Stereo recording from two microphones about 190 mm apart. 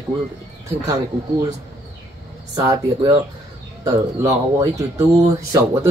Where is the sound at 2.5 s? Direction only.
20° right (ahead or behind).